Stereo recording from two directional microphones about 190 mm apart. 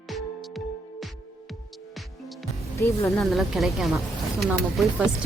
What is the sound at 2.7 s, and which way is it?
Speech, 15° left (ahead or behind).